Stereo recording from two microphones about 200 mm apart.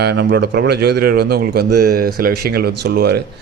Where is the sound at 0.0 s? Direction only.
55° right (ahead or behind).